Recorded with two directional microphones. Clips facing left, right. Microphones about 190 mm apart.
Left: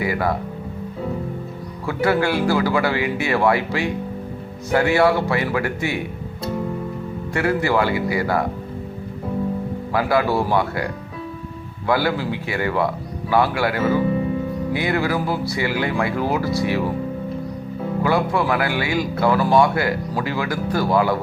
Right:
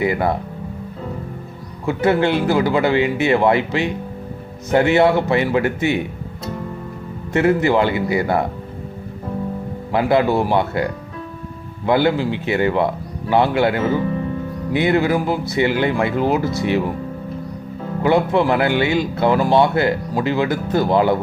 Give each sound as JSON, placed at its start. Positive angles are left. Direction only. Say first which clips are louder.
{"t": 0.0, "sound": "speech", "louder": "right 3 dB", "side_deg": -25}
{"t": 1.9, "sound": "speech", "louder": "right 3 dB", "side_deg": -20}
{"t": 7.3, "sound": "speech", "louder": "right 4 dB", "side_deg": -20}
{"t": 9.9, "sound": "speech", "louder": "right 3 dB", "side_deg": -25}
{"t": 11.9, "sound": "speech", "louder": "right 4 dB", "side_deg": -20}
{"t": 18.0, "sound": "speech", "louder": "right 5 dB", "side_deg": -20}